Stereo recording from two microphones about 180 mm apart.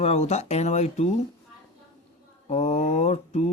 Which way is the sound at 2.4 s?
40° left (ahead or behind).